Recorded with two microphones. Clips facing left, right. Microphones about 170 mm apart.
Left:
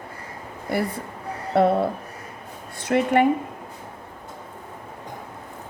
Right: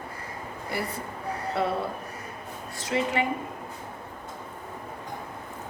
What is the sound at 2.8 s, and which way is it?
Speech, 55° left (ahead or behind).